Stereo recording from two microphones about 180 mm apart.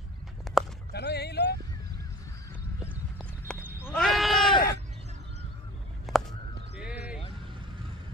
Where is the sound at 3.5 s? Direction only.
5° left (ahead or behind).